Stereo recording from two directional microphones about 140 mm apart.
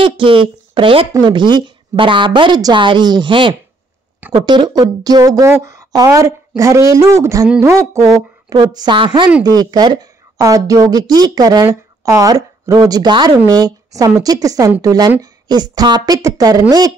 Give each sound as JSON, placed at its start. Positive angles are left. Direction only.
{"t": 0.0, "sound": "a woman's voice", "side_deg": -40}